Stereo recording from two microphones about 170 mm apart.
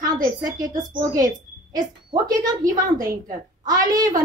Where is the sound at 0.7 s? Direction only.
50° right (ahead or behind).